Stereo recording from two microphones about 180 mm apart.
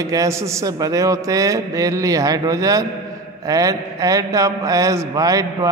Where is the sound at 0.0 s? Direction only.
20° right (ahead or behind).